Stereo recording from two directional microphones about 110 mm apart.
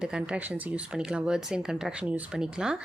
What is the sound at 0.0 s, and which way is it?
A woman's voice, 5° right (ahead or behind).